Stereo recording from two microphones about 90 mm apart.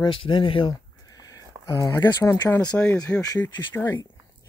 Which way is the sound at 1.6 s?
35° left (ahead or behind).